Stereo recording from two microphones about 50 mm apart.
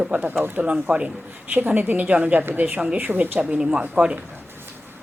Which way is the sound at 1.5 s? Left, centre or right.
Right.